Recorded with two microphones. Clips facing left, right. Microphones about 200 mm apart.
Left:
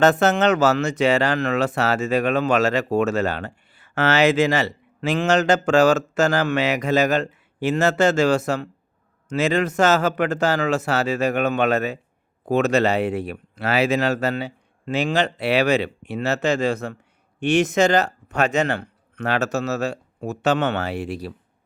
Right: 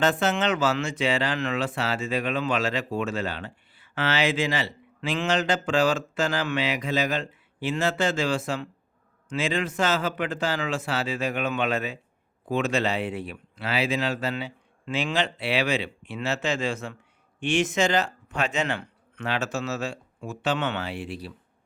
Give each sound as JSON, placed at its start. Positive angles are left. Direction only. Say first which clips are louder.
{"t": 0.0, "sound": "speech", "louder": "left 7 dB", "side_deg": 40}